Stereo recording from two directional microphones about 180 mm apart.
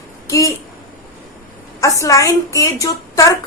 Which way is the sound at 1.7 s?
15° left (ahead or behind).